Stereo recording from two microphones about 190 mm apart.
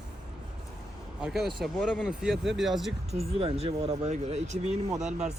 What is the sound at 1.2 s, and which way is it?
Speech, centre (ahead or behind).